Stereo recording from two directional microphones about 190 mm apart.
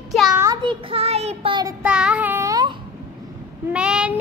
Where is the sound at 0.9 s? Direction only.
30° right (ahead or behind).